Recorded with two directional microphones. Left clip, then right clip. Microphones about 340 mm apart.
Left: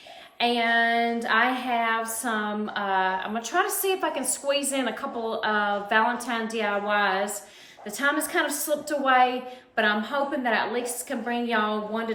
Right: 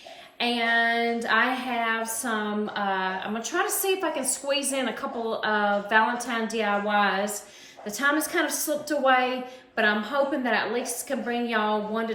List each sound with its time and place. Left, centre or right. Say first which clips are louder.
0.3 s a woman's voice: left 1 dB; centre